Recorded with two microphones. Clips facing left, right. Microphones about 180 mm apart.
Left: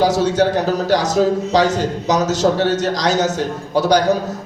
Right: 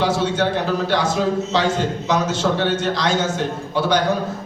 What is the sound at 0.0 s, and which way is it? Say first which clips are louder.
A man's voice: left 4 dB; 40° left (ahead or behind).